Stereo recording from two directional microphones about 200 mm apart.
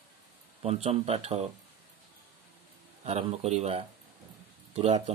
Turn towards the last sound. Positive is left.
turn(degrees=-30)  # may be behind; listen again after turning